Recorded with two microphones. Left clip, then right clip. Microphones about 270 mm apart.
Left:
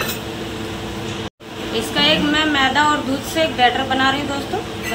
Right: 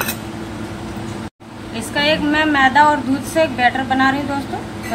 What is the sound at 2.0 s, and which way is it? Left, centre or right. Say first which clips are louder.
A woman's voice: right 1 dB; centre.